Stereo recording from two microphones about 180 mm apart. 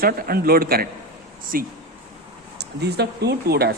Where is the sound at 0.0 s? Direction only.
55° right (ahead or behind).